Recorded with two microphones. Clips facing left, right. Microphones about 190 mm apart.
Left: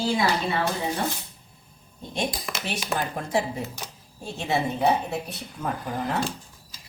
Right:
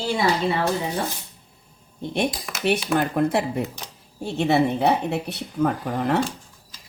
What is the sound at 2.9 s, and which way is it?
A woman's voice, 60° right (ahead or behind).